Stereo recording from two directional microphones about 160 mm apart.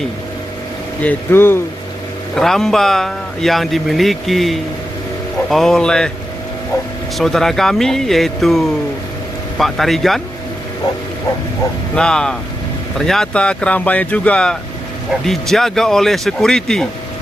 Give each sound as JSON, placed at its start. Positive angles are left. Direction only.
{"t": 1.0, "sound": "speech", "side_deg": 15}
{"t": 2.3, "sound": "speech", "side_deg": 0}
{"t": 7.2, "sound": "speech", "side_deg": 0}
{"t": 11.9, "sound": "speech", "side_deg": 5}